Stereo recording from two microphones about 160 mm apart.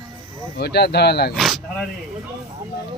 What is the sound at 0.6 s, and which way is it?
Speech, 90° left.